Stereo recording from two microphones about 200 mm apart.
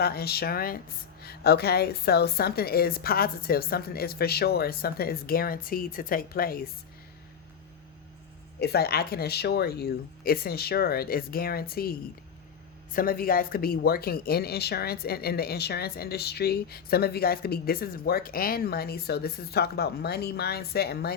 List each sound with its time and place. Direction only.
0.0 s speech: 50° left (ahead or behind)
8.6 s speech: 50° left (ahead or behind)